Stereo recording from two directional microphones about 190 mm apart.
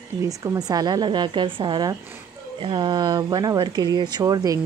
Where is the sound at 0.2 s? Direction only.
15° right (ahead or behind).